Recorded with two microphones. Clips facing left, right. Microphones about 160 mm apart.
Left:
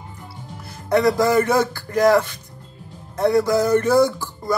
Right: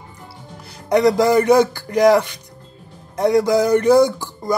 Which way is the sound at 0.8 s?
15° right (ahead or behind).